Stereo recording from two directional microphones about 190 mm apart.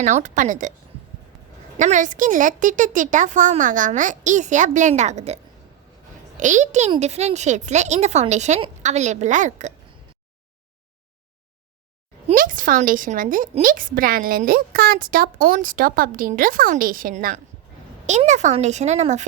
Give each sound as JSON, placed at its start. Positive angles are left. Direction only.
{"t": 0.0, "sound": "speech", "side_deg": -40}
{"t": 1.8, "sound": "speech", "side_deg": -40}
{"t": 12.3, "sound": "a woman's voice", "side_deg": -45}